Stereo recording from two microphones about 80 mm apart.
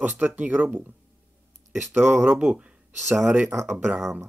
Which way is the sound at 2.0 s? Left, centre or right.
Right.